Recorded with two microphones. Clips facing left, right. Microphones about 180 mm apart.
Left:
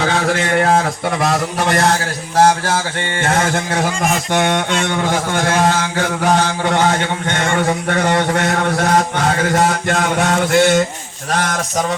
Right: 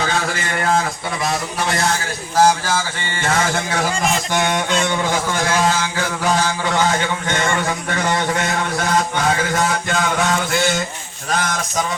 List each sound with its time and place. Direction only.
0.0 s a man's voice: 70° left (ahead or behind); by 1.9 s 55° left (ahead or behind)
2.6 s a sound: 60° left (ahead or behind)
11.3 s a man's voice: 70° left (ahead or behind)